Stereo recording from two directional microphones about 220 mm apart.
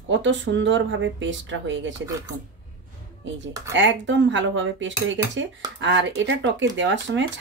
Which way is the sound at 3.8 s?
55° right (ahead or behind).